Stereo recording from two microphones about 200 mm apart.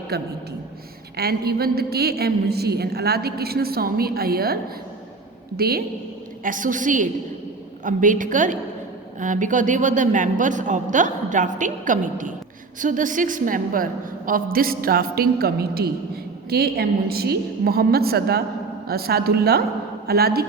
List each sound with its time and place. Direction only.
0.1 s a woman's voice: 50° right (ahead or behind)
5.5 s a woman's voice: 50° right (ahead or behind)